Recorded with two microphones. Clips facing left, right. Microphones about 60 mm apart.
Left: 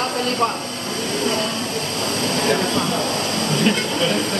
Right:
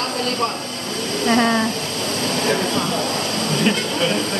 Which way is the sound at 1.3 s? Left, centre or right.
Right.